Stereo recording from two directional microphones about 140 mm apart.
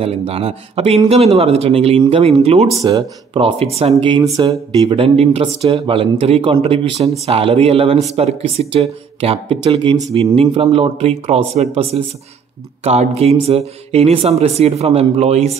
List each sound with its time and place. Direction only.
0.0 s speech: 45° right (ahead or behind)
2.8 s speech: 25° right (ahead or behind)
3.3 s speech: 45° right (ahead or behind)